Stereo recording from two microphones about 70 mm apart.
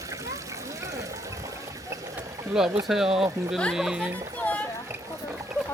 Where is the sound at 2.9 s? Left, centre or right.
Centre.